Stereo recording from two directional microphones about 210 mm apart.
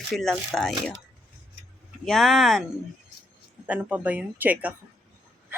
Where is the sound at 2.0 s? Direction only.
Centre (ahead or behind).